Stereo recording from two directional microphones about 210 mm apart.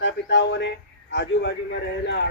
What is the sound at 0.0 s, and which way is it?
A man's voice, 55° left (ahead or behind).